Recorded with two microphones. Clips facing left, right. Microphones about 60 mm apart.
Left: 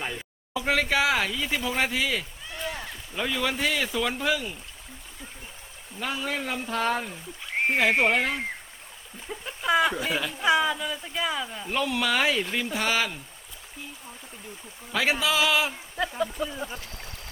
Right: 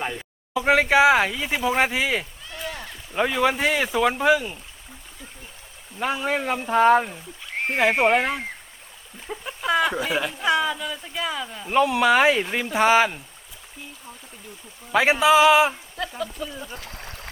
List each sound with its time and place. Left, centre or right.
0.0 s speech: centre
0.5 s speech: right
2.5 s a sound: centre
3.3 s speech: right
6.0 s speech: right
9.2 s a sound: centre
10.3 s speech: centre
11.7 s speech: right
14.9 s speech: right
16.0 s speech: centre